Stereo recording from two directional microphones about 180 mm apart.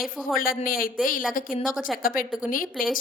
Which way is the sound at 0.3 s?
55° left (ahead or behind).